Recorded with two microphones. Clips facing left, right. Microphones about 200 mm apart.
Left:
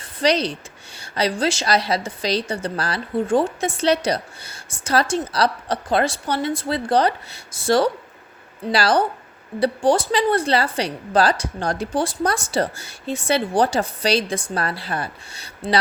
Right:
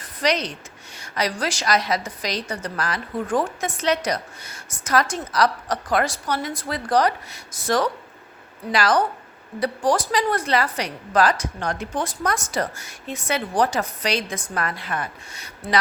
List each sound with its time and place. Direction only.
0.0 s a woman's voice: 30° left (ahead or behind)